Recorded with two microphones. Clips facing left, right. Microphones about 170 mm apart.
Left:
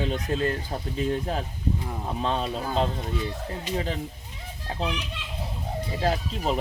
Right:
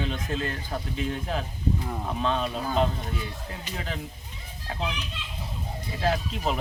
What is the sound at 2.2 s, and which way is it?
Speech, 35° left (ahead or behind).